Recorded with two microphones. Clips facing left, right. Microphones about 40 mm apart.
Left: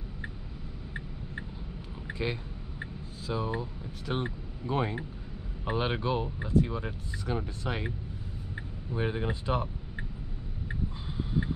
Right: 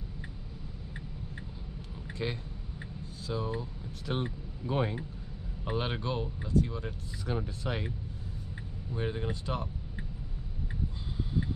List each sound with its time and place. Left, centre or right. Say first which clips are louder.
2.0 s a sound: left 3 dB; centre
4.0 s speech: left 1 dB; centre
7.2 s speech: left 1 dB; centre
8.9 s speech: left 3 dB; centre